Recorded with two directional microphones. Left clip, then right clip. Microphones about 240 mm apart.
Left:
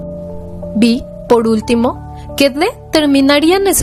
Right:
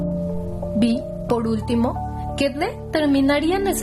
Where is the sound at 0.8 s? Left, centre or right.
Left.